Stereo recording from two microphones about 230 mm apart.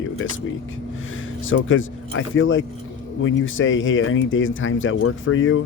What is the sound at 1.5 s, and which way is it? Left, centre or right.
Speech, left.